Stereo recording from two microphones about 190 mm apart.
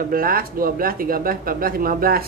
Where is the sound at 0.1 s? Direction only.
50° right (ahead or behind).